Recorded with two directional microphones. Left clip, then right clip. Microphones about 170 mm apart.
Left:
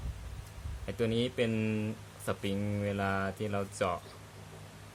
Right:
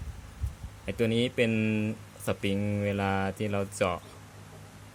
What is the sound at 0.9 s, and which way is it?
Speech, 25° right (ahead or behind).